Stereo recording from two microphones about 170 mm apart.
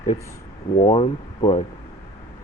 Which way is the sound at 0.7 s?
35° left (ahead or behind).